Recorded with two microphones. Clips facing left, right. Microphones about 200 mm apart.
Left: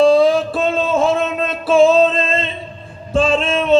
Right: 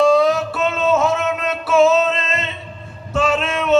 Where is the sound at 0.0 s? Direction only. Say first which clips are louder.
Left 3 dB; 30° left (ahead or behind).